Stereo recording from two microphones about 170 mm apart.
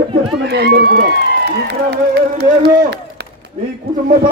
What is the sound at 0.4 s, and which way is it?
A man's voice, 70° right (ahead or behind).